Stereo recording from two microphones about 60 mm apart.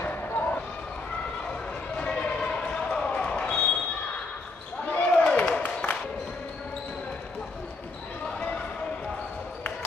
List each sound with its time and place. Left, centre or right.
0.0 s basketball bounce: left
2.0 s basketball bounce: centre
4.8 s basketball bounce: centre